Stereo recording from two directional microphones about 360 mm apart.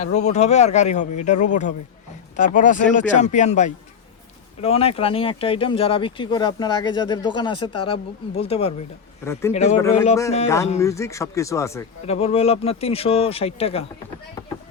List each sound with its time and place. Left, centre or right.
0.0 s a man's voice: centre
9.5 s a man's voice: centre